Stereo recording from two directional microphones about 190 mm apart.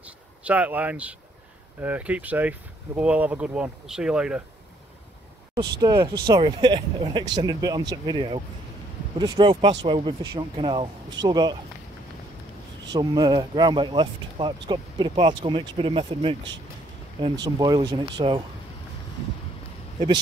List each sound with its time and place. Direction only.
0.0 s a sound: 5° right (ahead or behind)
1.8 s speech: 10° right (ahead or behind)
5.8 s speech: 20° right (ahead or behind)
12.9 s speech: 20° right (ahead or behind)